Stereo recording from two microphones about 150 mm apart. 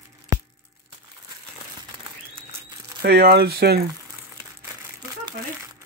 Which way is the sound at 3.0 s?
90° right.